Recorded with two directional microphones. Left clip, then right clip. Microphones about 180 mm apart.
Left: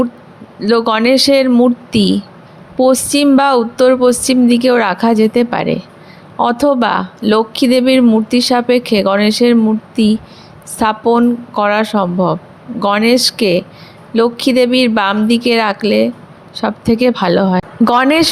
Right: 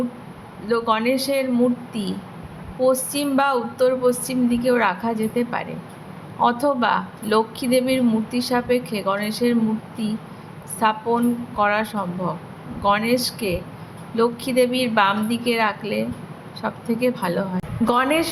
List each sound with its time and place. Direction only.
0.6 s speech: 50° left (ahead or behind)
10.8 s speech: 45° left (ahead or behind)